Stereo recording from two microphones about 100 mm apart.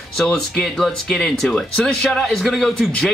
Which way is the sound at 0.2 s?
Centre (ahead or behind).